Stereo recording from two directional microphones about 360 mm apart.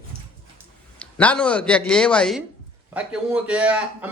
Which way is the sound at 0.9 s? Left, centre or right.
Centre.